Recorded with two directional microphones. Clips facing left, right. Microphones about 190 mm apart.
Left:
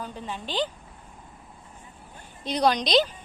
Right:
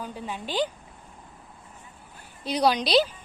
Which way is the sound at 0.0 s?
10° right (ahead or behind).